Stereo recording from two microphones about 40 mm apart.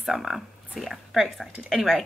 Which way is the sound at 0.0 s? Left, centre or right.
Centre.